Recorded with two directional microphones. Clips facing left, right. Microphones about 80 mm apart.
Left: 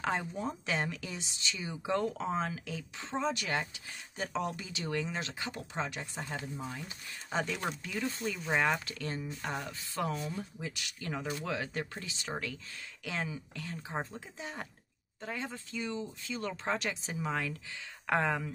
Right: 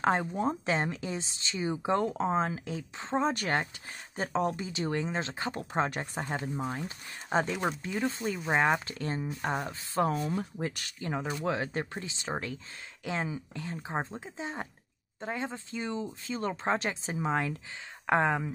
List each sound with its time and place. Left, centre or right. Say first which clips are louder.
0.0 s speech: right 6 dB; right
6.8 s speech: right 5 dB; right
11.0 s speech: right 4 dB; right